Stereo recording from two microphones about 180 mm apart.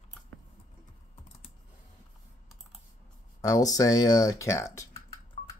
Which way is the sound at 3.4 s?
20° left (ahead or behind).